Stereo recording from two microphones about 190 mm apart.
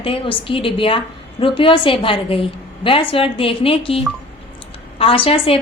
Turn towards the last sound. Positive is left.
turn(degrees=30)  # may be behind; listen again after turning